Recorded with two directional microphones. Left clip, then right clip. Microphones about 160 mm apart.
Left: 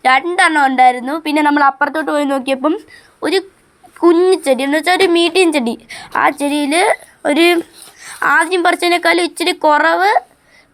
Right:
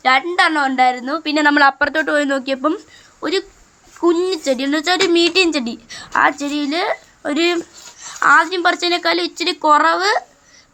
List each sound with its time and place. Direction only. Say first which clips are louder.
0.0 s speech: left 3 dB; 40° left (ahead or behind); by 1.5 s 25° left (ahead or behind)
1.5 s speech: left 1 dB; 5° left (ahead or behind)
2.4 s speech: left 3 dB; 25° left (ahead or behind)
3.2 s speech: left 4 dB; 40° left (ahead or behind)
4.0 s speech: left 6 dB; 30° left (ahead or behind)